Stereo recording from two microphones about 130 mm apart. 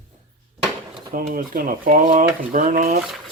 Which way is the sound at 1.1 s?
90° right.